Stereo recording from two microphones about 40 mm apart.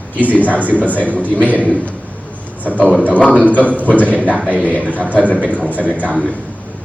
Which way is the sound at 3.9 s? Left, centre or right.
Left.